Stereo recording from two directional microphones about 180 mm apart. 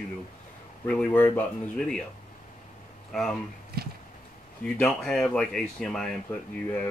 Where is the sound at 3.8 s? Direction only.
60° right (ahead or behind).